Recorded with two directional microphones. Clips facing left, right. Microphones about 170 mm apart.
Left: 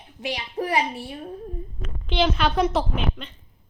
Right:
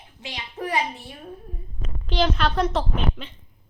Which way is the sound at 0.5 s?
30° left (ahead or behind).